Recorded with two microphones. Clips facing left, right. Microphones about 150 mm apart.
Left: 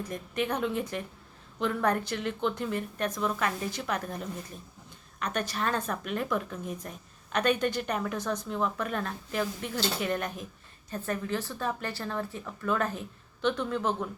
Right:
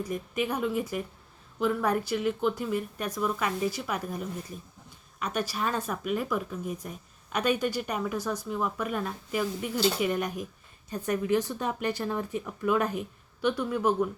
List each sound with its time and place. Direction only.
0.0 s a woman's voice: 10° right (ahead or behind)